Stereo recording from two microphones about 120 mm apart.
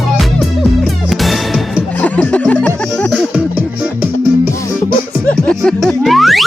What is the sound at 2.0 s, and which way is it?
Music, 10° left (ahead or behind).